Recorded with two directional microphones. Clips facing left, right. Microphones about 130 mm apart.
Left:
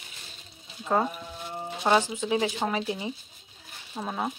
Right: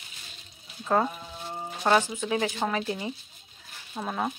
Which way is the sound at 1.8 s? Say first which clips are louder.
Even; 15° left (ahead or behind).